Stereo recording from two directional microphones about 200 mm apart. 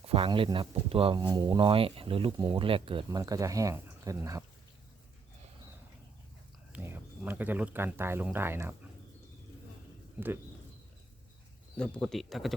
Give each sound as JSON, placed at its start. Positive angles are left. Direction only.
{"t": 0.0, "sound": "speech", "side_deg": -30}
{"t": 6.7, "sound": "speech", "side_deg": -10}
{"t": 11.8, "sound": "speech", "side_deg": 0}